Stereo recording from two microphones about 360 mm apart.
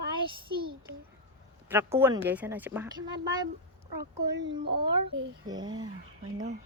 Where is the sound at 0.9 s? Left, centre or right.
Centre.